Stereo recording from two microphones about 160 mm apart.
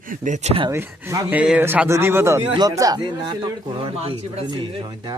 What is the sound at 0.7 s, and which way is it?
A man's voice, 15° right (ahead or behind).